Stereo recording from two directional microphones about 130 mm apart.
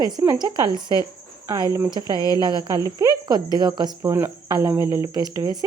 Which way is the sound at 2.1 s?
30° left (ahead or behind).